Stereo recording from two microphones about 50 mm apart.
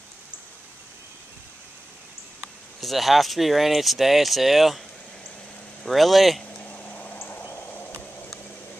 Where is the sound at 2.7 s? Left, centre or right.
Centre.